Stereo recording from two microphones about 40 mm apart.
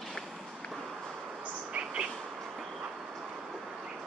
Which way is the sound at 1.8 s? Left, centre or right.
Right.